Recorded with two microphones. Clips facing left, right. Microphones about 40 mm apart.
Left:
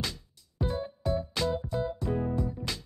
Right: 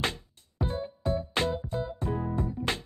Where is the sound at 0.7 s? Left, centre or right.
Right.